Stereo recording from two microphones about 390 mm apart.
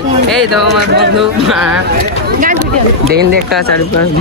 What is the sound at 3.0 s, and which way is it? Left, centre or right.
Speech, right.